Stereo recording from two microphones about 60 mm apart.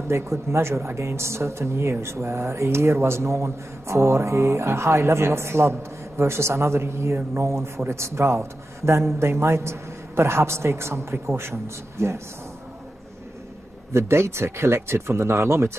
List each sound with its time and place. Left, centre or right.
0.1 s speech: right
13.9 s speech: right